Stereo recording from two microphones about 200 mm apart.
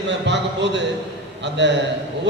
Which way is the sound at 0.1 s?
60° right (ahead or behind).